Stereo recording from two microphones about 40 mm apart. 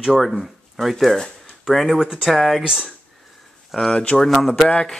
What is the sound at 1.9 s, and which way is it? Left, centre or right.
Speech, centre.